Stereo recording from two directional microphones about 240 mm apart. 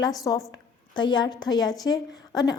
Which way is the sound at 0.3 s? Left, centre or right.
Centre.